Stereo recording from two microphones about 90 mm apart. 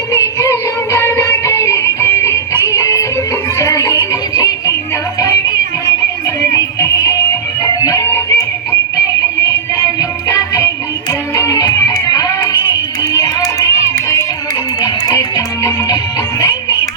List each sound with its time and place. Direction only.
0.1 s music: 35° left (ahead or behind)
6.5 s music: 35° left (ahead or behind)
9.7 s music: 45° left (ahead or behind)
13.0 s tap: 40° left (ahead or behind)
14.8 s music: 45° left (ahead or behind)